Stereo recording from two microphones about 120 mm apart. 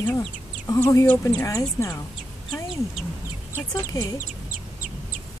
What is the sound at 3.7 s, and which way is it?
Speech, 30° left (ahead or behind).